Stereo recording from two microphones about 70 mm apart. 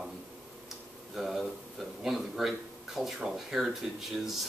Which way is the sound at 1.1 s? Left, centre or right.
Centre.